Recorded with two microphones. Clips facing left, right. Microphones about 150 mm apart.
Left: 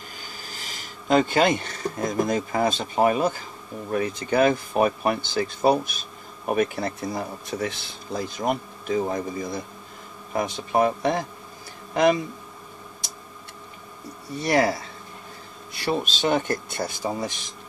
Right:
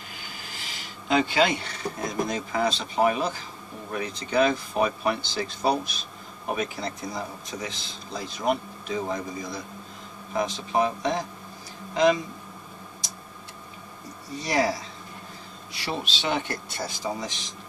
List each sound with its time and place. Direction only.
0.1 s speech: 40° left (ahead or behind)
14.4 s speech: 55° left (ahead or behind)